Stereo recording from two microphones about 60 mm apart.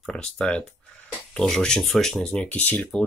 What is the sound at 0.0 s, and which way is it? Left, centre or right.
Speech, centre.